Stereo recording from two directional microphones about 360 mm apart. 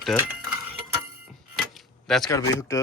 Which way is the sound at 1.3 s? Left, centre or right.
Centre.